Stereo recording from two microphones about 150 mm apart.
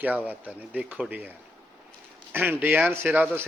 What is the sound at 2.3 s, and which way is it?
Speech, 10° right (ahead or behind).